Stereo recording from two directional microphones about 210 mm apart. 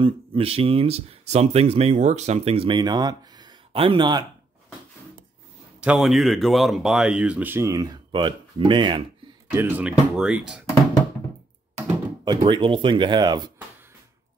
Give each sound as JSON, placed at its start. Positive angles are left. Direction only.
{"t": 0.0, "sound": "speech", "side_deg": -25}
{"t": 5.8, "sound": "speech", "side_deg": -5}
{"t": 9.5, "sound": "speech", "side_deg": -10}
{"t": 12.4, "sound": "speech", "side_deg": -25}